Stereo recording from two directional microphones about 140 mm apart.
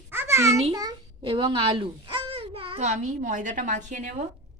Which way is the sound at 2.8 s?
65° right (ahead or behind).